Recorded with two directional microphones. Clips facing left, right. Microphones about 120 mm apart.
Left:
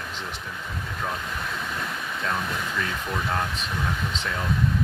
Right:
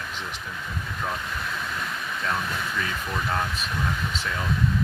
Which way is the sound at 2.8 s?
Centre (ahead or behind).